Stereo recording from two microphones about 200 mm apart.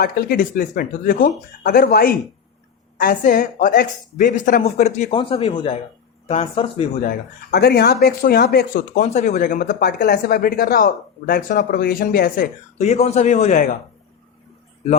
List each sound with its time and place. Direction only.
0.0 s a woman's voice: 50° left (ahead or behind); by 6.8 s 30° left (ahead or behind)
7.0 s speech: 45° left (ahead or behind)
12.8 s a woman's voice: 35° left (ahead or behind)